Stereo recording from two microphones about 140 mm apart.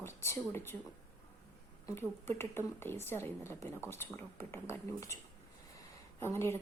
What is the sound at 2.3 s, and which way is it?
Speech, 15° left (ahead or behind).